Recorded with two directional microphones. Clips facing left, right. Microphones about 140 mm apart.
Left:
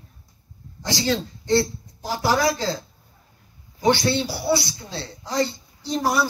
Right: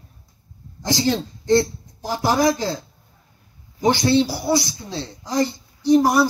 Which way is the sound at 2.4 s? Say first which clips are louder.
Right 3 dB; 20° right (ahead or behind).